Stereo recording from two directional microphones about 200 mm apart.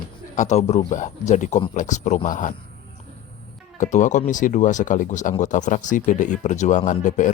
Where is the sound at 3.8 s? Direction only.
40° left (ahead or behind).